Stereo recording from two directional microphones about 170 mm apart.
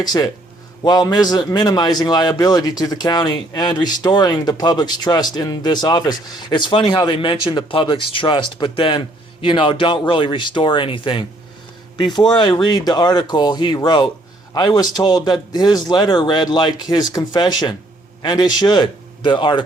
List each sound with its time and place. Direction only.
0.0 s a man's voice: 25° left (ahead or behind)